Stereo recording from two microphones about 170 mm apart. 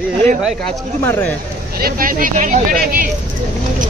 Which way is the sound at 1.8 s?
55° right (ahead or behind).